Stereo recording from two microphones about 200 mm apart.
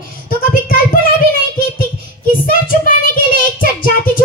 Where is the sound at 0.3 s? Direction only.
45° left (ahead or behind).